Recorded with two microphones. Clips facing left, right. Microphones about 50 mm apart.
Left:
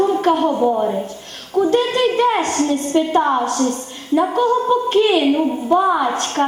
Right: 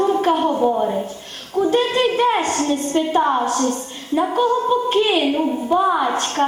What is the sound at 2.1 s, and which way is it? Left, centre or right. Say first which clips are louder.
A woman's voice: left 1 dB; centre.